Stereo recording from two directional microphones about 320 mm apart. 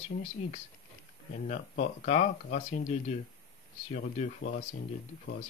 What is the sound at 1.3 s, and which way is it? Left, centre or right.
Speech, left.